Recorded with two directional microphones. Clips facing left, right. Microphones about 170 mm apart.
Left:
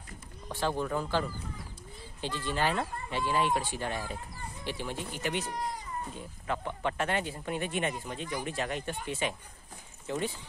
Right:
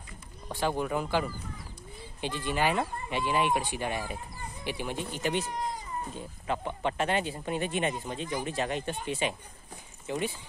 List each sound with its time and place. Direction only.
0.5 s speech: 15° right (ahead or behind)
2.2 s speech: 15° right (ahead or behind)
6.1 s speech: 20° right (ahead or behind)